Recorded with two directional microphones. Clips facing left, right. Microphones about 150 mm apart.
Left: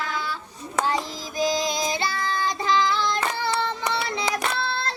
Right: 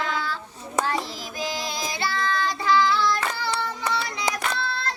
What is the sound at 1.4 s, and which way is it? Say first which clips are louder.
Child singing: left 6 dB; 15° left (ahead or behind).